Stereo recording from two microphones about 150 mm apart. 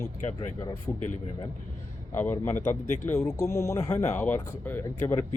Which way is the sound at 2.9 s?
55° left (ahead or behind).